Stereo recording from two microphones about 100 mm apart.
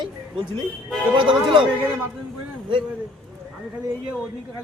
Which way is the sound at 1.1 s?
55° right (ahead or behind).